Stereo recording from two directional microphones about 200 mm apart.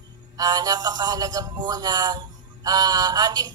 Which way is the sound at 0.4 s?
20° right (ahead or behind).